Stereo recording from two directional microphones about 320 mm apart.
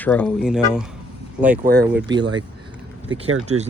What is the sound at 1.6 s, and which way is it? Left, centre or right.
Speech, right.